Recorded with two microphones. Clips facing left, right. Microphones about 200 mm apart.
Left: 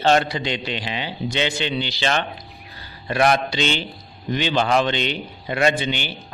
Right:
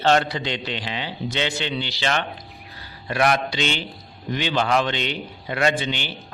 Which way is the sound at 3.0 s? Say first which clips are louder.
Left 2 dB; 30° left (ahead or behind).